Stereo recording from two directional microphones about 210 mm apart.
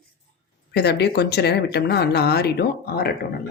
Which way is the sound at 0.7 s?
50° left (ahead or behind).